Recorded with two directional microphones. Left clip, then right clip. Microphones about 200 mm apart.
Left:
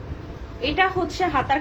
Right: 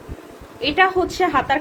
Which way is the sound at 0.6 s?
55° right (ahead or behind).